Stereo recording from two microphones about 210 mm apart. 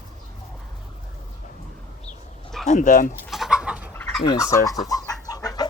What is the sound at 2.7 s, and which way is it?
Speech, 40° left (ahead or behind).